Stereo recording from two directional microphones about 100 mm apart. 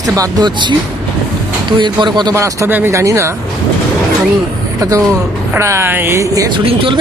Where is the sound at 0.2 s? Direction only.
45° right (ahead or behind).